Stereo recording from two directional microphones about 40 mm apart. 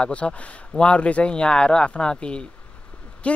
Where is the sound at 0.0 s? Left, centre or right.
Left.